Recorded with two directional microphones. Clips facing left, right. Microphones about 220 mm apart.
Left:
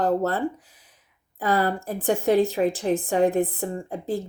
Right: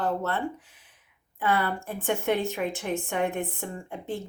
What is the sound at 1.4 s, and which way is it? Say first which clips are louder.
A woman's voice: left 4 dB; 35° left (ahead or behind).